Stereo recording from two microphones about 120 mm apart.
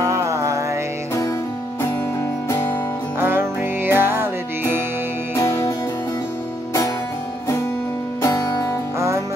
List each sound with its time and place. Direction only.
0.0 s music: 25° right (ahead or behind)
3.2 s music: 15° right (ahead or behind)
5.3 s music: 25° left (ahead or behind)
8.2 s music: 30° left (ahead or behind)